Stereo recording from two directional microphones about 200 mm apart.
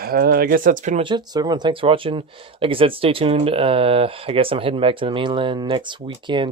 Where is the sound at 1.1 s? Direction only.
20° right (ahead or behind).